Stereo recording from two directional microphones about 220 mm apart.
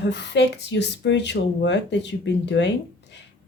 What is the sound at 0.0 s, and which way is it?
Speech, 55° left (ahead or behind).